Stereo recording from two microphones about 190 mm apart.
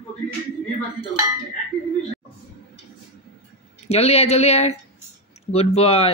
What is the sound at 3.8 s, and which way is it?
Speech, 35° left (ahead or behind).